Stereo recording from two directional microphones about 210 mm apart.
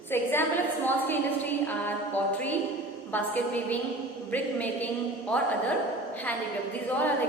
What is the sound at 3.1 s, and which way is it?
A woman's voice, 10° left (ahead or behind).